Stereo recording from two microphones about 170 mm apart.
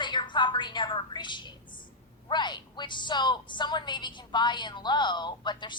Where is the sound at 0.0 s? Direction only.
25° left (ahead or behind).